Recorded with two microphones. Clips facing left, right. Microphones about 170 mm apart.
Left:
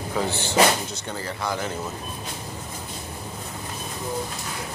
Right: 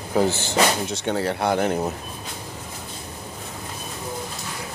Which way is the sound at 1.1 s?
65° right (ahead or behind).